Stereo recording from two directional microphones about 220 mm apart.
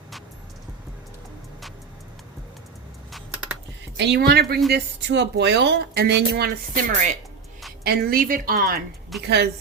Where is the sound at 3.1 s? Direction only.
5° right (ahead or behind).